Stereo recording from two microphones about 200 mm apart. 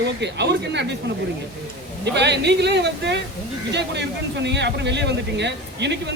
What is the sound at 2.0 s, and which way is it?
Speech, 60° right (ahead or behind).